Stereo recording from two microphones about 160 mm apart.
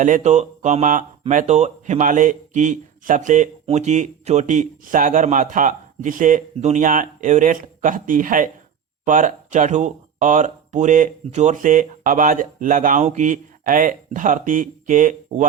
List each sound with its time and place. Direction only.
0.0 s a man's voice: 50° right (ahead or behind)